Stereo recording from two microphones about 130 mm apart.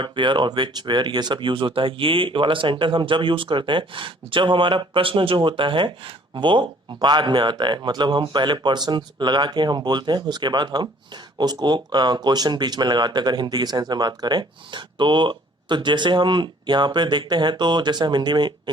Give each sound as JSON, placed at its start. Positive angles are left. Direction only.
{"t": 0.0, "sound": "speech", "side_deg": -40}